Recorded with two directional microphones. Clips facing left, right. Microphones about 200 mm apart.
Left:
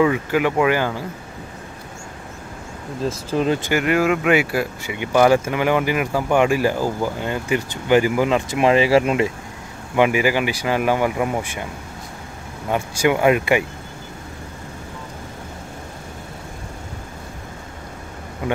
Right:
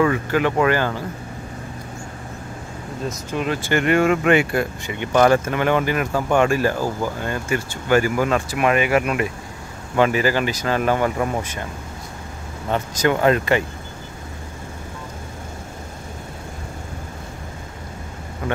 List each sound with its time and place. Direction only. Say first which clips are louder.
0.0 s speech: left 1 dB; 10° left (ahead or behind)
3.3 s speech: left 4 dB; 30° left (ahead or behind)
3.7 s speech: right 3 dB; 5° left (ahead or behind); by 9.3 s 25° left (ahead or behind)
9.9 s speech: left 1 dB; 15° left (ahead or behind)
12.6 s speech: left 1 dB; 10° left (ahead or behind)